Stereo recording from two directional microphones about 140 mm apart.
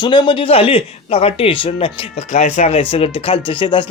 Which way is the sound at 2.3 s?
60° left (ahead or behind).